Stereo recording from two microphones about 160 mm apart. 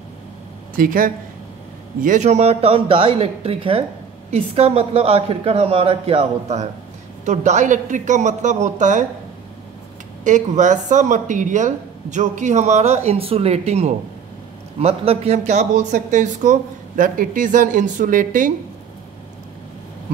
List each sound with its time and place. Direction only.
0.7 s a woman's voice: 60° right (ahead or behind)
10.2 s speech: 50° right (ahead or behind)